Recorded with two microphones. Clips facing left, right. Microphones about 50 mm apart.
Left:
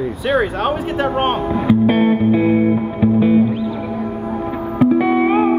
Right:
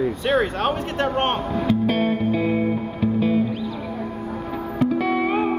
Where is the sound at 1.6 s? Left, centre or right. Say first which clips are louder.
Left 7 dB; centre.